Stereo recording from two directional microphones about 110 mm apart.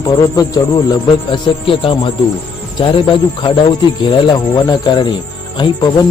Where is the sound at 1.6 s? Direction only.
55° left (ahead or behind).